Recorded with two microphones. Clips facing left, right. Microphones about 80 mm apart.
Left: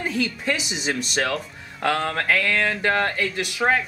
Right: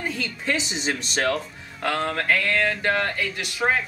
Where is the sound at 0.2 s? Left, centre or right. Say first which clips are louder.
Left 2 dB; centre.